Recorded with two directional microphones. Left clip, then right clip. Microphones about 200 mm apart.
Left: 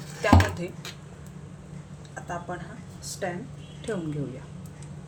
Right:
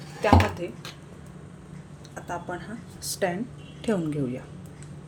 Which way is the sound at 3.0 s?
50° right (ahead or behind).